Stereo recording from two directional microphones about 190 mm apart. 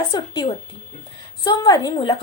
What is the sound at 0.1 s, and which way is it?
A woman's voice, 25° left (ahead or behind).